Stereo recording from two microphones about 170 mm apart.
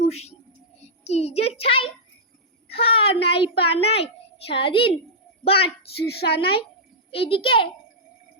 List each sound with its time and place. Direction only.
0.0 s a sound: 40° left (ahead or behind)
1.0 s a child's voice: 40° left (ahead or behind)
6.1 s a woman's voice: 70° left (ahead or behind)
7.1 s a child's voice: 35° left (ahead or behind)